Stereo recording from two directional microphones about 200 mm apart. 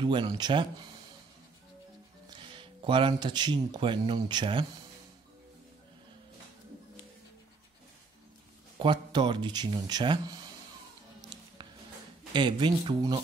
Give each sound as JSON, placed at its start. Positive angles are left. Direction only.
{"t": 0.0, "sound": "speech", "side_deg": -25}
{"t": 2.5, "sound": "speech", "side_deg": -25}
{"t": 8.7, "sound": "speech", "side_deg": -25}
{"t": 12.3, "sound": "speech", "side_deg": -25}